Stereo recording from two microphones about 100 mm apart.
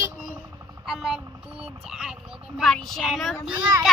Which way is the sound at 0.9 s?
5° right (ahead or behind).